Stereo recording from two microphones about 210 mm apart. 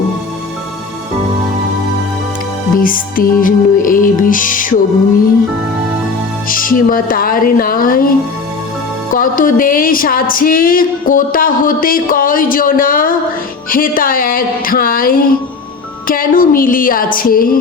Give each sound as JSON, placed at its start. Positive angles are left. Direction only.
{"t": 2.7, "sound": "music", "side_deg": 40}
{"t": 6.5, "sound": "speech", "side_deg": 40}
{"t": 9.1, "sound": "music", "side_deg": 40}
{"t": 13.7, "sound": "speech", "side_deg": 40}
{"t": 16.0, "sound": "music", "side_deg": 40}